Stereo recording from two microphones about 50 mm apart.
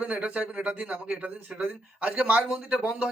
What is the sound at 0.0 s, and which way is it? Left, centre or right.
Speech, right.